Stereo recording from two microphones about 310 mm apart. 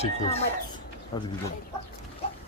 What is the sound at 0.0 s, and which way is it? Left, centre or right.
Speech, centre.